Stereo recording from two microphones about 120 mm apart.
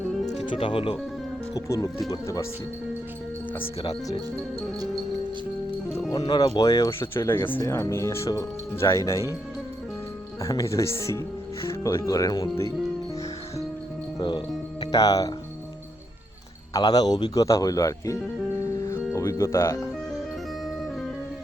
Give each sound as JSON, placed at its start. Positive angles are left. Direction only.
{"t": 0.5, "sound": "speech", "side_deg": 45}
{"t": 1.5, "sound": "speech", "side_deg": 25}
{"t": 6.1, "sound": "speech", "side_deg": 35}
{"t": 10.4, "sound": "speech", "side_deg": 25}
{"t": 14.2, "sound": "speech", "side_deg": 40}
{"t": 16.7, "sound": "speech", "side_deg": 35}
{"t": 18.6, "sound": "music", "side_deg": 25}